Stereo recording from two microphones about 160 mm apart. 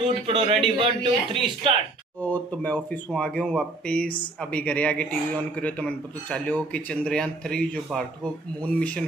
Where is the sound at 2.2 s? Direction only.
10° left (ahead or behind).